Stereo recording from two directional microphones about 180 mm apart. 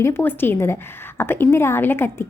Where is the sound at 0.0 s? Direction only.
10° left (ahead or behind).